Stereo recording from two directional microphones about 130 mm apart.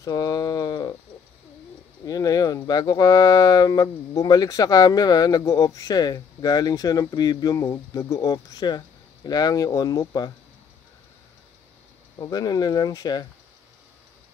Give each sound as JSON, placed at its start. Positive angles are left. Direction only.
{"t": 0.0, "sound": "a sound", "side_deg": 30}
{"t": 2.0, "sound": "speech", "side_deg": 30}
{"t": 12.2, "sound": "speech", "side_deg": 30}